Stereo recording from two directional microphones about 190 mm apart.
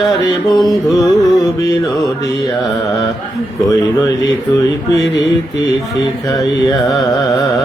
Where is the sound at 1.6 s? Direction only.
20° left (ahead or behind).